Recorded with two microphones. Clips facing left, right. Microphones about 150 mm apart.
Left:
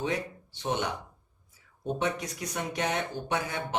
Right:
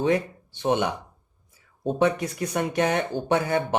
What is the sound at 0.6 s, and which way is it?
Speech, 60° right (ahead or behind).